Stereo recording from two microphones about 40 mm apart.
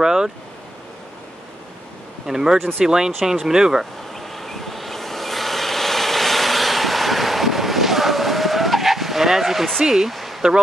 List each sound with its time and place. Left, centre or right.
0.0 s vehicle: centre
2.2 s speech: centre
4.1 s vehicle: centre
9.8 s speech: centre
10.1 s a sound: centre